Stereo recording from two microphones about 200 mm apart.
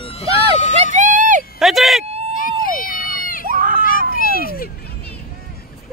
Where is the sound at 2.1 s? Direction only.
30° right (ahead or behind).